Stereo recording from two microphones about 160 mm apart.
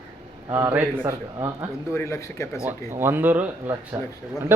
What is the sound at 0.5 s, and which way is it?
Speech, 15° right (ahead or behind).